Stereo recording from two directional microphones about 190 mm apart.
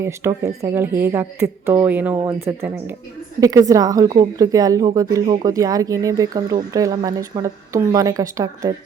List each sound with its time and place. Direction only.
0.0 s a woman's voice: 15° right (ahead or behind)